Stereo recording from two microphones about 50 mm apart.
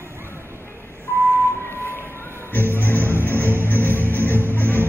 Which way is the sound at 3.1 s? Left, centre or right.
Left.